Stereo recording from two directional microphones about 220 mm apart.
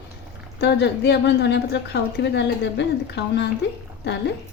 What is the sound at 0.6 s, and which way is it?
A woman's voice, 50° left (ahead or behind).